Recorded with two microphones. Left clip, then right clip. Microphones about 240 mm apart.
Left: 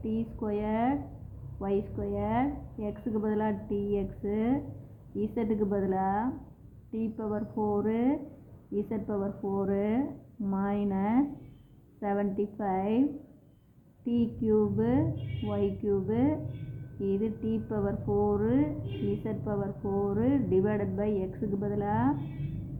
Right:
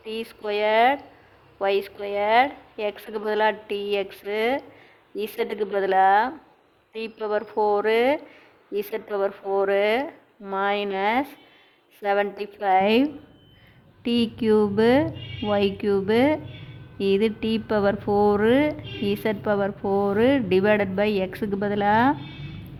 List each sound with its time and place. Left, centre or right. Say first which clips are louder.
0.1 s a woman's voice: right 7 dB; right
18.2 s a woman's voice: right 9 dB; right